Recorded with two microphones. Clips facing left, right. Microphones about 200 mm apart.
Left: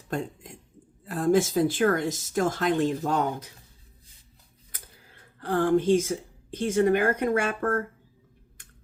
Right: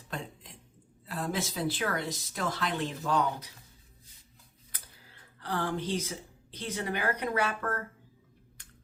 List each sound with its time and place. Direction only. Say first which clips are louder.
0.1 s a sound: left 9 dB; 45° left (ahead or behind)
1.0 s speech: left 11 dB; 50° left (ahead or behind)
5.4 s speech: left 10 dB; 50° left (ahead or behind)